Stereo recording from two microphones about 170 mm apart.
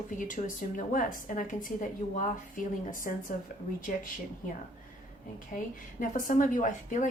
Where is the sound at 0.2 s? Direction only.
50° left (ahead or behind).